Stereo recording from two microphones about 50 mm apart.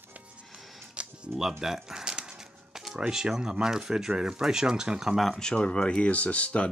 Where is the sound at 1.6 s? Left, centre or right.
Centre.